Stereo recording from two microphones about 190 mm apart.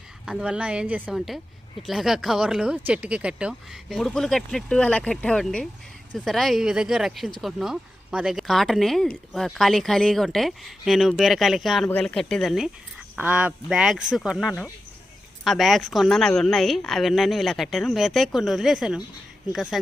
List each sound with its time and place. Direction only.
0.3 s speech: 5° right (ahead or behind)